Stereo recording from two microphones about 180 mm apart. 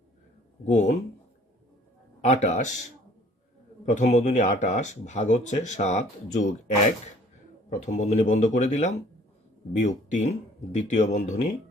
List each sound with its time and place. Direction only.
0.6 s speech: 40° left (ahead or behind)
2.2 s speech: 40° left (ahead or behind)
3.8 s a man's voice: 40° left (ahead or behind)